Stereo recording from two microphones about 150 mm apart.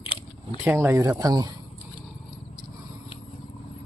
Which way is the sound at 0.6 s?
15° right (ahead or behind).